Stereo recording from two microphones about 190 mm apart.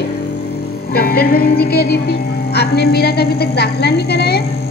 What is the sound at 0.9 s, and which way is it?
A woman's voice, 55° left (ahead or behind).